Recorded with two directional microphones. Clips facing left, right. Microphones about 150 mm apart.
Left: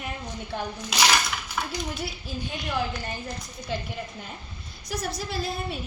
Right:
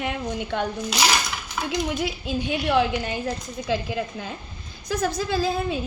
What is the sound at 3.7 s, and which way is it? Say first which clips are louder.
A woman's voice: right 7 dB; 90° right.